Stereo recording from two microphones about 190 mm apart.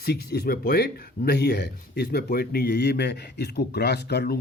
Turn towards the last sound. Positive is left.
turn(degrees=60)  # may be behind; listen again after turning